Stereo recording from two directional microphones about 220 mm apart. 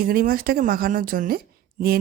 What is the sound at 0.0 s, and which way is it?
A woman's voice, 40° right (ahead or behind).